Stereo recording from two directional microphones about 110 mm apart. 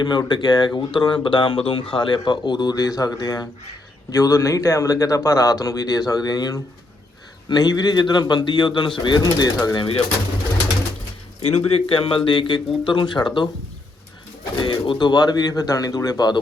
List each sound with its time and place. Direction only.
0.0 s speech: 40° left (ahead or behind)
11.4 s a man's voice: 65° left (ahead or behind); by 13.5 s 45° left (ahead or behind)
14.6 s speech: 50° left (ahead or behind)